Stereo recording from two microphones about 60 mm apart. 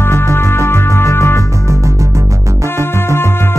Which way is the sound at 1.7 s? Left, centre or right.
Right.